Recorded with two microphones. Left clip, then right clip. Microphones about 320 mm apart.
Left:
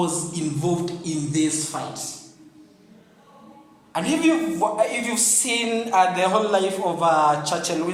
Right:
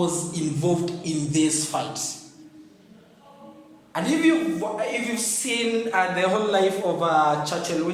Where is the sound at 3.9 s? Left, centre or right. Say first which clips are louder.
Left 1 dB; centre.